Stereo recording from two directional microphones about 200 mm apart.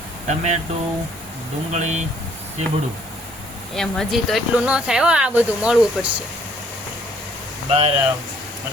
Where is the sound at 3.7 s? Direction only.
Centre (ahead or behind).